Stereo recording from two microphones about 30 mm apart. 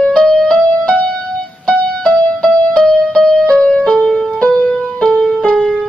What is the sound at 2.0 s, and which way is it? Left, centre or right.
Music, left.